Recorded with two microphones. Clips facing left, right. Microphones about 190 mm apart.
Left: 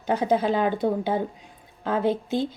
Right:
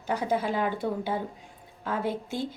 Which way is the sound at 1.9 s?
25° left (ahead or behind).